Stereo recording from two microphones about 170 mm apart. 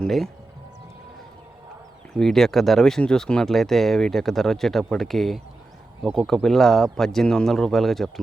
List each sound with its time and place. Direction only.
0.0 s speech: centre (ahead or behind)
2.1 s speech: centre (ahead or behind)